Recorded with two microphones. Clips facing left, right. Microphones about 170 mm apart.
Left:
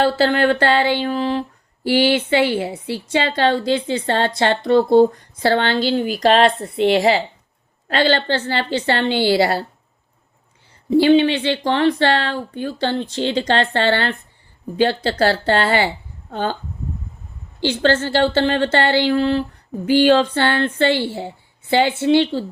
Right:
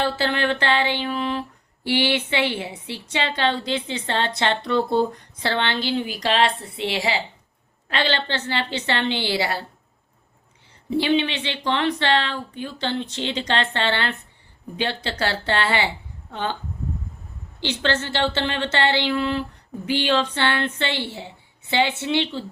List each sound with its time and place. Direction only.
0.0 s speech: 40° left (ahead or behind)
11.0 s speech: 40° left (ahead or behind)
17.6 s speech: 45° left (ahead or behind)